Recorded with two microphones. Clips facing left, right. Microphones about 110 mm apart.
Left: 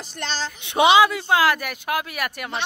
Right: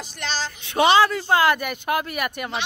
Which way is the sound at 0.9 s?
10° left (ahead or behind).